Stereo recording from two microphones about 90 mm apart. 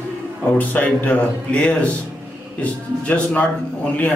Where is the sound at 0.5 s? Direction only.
15° left (ahead or behind).